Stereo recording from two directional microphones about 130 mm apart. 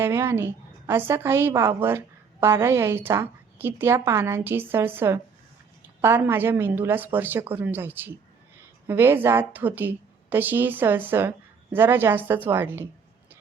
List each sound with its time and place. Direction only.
0.0 s a woman's voice: 20° right (ahead or behind)